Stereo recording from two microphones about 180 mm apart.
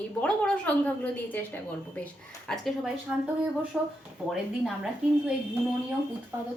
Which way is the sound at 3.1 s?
5° right (ahead or behind).